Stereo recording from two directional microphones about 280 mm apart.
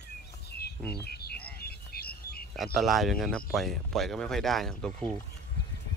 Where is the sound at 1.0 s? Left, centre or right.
Left.